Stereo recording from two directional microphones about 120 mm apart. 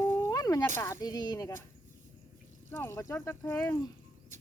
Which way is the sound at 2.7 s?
20° left (ahead or behind).